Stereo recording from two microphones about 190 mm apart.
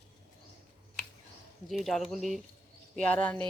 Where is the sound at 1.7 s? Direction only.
Centre (ahead or behind).